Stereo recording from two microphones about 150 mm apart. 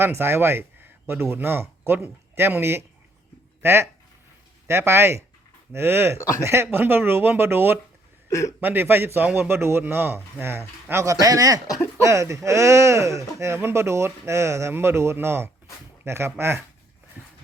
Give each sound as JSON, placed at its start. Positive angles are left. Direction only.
{"t": 0.0, "sound": "a man's voice", "side_deg": -15}
{"t": 8.3, "sound": "speech", "side_deg": 20}
{"t": 8.6, "sound": "a man's voice", "side_deg": -15}
{"t": 17.2, "sound": "a sound", "side_deg": -15}